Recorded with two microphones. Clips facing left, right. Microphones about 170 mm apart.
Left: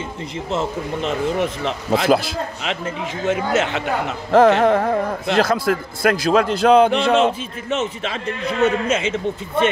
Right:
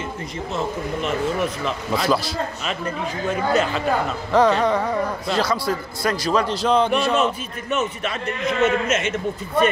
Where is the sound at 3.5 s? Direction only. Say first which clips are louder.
Left 1 dB; 80° left.